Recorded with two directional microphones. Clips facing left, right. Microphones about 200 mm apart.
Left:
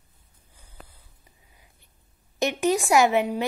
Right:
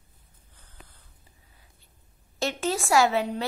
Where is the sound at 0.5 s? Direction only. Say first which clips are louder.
Left 4 dB; 10° left (ahead or behind).